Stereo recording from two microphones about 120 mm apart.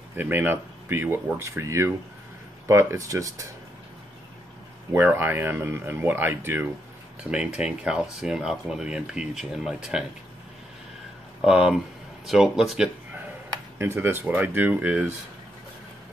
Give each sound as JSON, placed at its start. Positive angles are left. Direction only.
{"t": 0.1, "sound": "speech", "side_deg": -15}
{"t": 4.9, "sound": "speech", "side_deg": -20}
{"t": 11.4, "sound": "speech", "side_deg": -5}
{"t": 13.7, "sound": "speech", "side_deg": -20}